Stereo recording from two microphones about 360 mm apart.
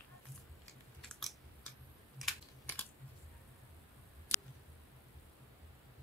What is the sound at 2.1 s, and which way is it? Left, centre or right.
Typing, centre.